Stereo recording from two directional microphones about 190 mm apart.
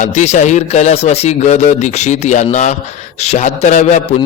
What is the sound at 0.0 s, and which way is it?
A man's voice, 40° left (ahead or behind).